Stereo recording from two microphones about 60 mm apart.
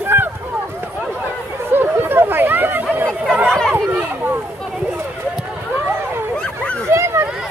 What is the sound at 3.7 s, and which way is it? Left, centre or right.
Chatter, right.